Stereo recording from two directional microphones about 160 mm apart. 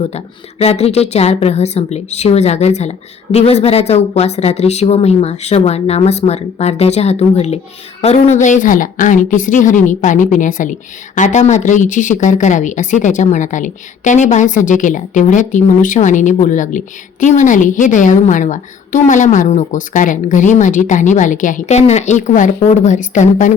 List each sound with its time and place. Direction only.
0.6 s a woman's voice: 40° left (ahead or behind)